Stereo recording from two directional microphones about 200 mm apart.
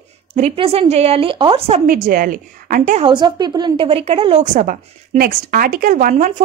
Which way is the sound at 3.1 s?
20° right (ahead or behind).